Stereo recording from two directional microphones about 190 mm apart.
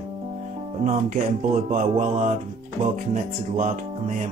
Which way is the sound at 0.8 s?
40° right (ahead or behind).